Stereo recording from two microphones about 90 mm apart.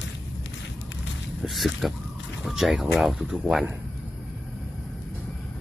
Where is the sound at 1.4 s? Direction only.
Centre (ahead or behind).